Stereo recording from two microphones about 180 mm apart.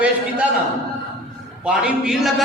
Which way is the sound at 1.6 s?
5° right (ahead or behind).